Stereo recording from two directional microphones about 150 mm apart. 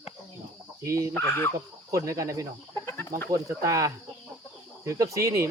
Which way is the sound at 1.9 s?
20° right (ahead or behind).